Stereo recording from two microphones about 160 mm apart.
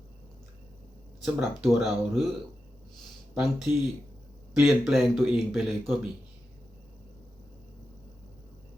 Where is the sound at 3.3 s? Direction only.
5° right (ahead or behind).